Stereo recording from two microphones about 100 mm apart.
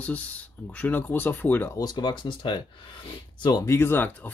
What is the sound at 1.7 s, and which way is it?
Speech, 45° left (ahead or behind).